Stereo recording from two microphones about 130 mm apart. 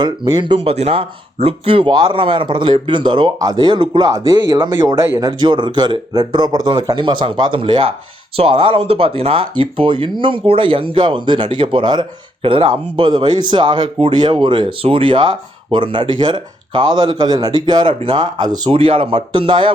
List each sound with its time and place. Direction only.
0.0 s speech: 35° right (ahead or behind)
4.3 s speech: 20° right (ahead or behind)
4.6 s speech: 35° right (ahead or behind)